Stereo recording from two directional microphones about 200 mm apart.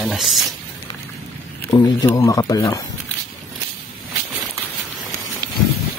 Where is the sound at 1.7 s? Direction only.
20° left (ahead or behind).